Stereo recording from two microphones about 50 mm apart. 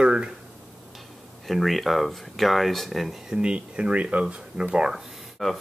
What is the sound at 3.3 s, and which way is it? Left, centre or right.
Speech, centre.